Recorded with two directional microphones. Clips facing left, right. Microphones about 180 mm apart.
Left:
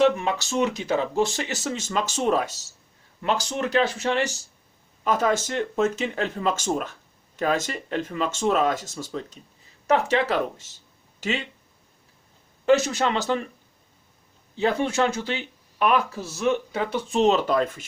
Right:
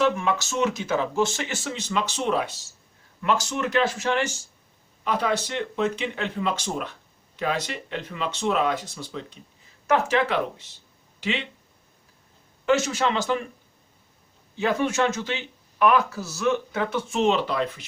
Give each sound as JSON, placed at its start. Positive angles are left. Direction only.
{"t": 0.3, "sound": "speech", "side_deg": 35}
{"t": 3.2, "sound": "speech", "side_deg": 30}
{"t": 12.6, "sound": "speech", "side_deg": 35}
{"t": 14.6, "sound": "speech", "side_deg": 30}
{"t": 16.4, "sound": "speech", "side_deg": 30}